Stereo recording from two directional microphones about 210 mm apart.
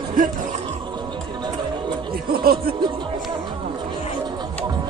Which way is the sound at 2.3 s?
45° right (ahead or behind).